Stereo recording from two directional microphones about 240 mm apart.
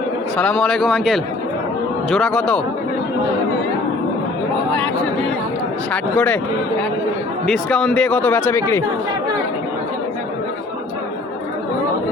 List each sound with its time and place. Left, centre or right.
0.3 s speech: centre
5.9 s speech: centre
7.4 s speech: centre